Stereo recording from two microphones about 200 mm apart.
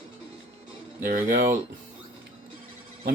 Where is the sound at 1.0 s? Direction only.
40° right (ahead or behind).